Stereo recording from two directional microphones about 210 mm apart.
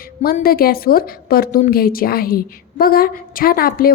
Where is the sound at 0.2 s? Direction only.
45° left (ahead or behind).